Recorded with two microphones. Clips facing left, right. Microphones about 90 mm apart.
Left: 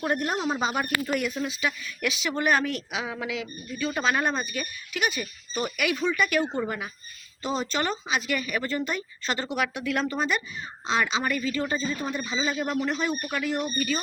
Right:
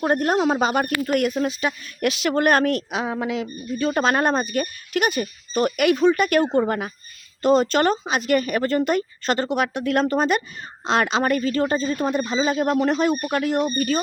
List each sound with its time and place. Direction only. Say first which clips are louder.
0.2 s speech: right 7 dB; 55° right (ahead or behind)
6.0 s speech: right 5 dB; 45° right (ahead or behind)
7.4 s speech: right 10 dB; 70° right (ahead or behind); by 12.4 s 55° right (ahead or behind)
12.4 s speech: right 7 dB; 45° right (ahead or behind)